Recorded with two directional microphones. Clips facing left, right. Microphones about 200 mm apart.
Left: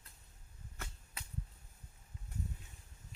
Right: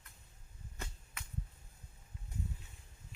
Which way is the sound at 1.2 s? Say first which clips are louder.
Even; 35° left (ahead or behind).